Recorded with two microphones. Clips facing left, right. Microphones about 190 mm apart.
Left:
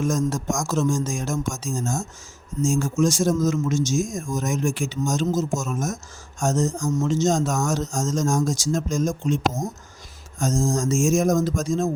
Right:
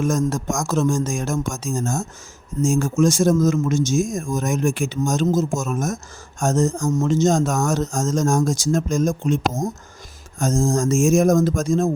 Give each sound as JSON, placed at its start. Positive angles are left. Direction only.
{"t": 0.0, "sound": "a man's voice", "side_deg": -55}